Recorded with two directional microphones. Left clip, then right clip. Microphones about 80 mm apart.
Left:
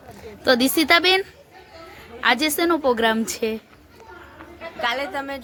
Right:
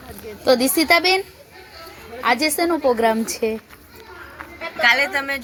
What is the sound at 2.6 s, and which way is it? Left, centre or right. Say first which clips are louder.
Speech: right 1 dB; left.